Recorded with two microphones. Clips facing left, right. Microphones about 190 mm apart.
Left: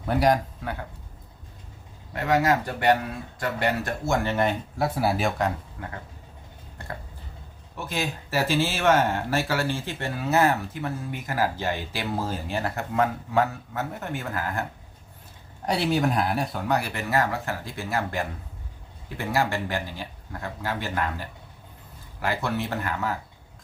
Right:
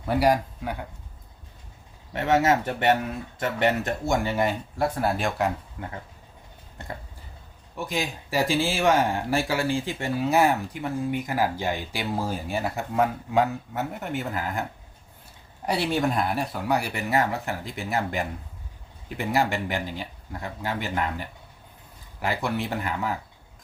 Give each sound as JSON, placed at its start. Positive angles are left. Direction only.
{"t": 0.1, "sound": "speech", "side_deg": -5}
{"t": 2.1, "sound": "speech", "side_deg": -25}
{"t": 4.8, "sound": "speech", "side_deg": 5}
{"t": 7.9, "sound": "speech", "side_deg": -15}
{"t": 15.6, "sound": "speech", "side_deg": 0}